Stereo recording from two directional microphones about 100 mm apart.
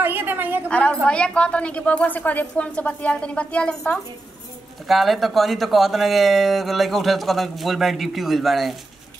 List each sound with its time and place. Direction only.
0.0 s a woman's voice: 20° right (ahead or behind)
0.7 s speech: 10° left (ahead or behind)
4.8 s speech: centre (ahead or behind)